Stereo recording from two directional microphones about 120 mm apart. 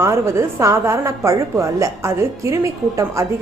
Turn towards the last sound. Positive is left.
turn(degrees=-25)  # may be behind; listen again after turning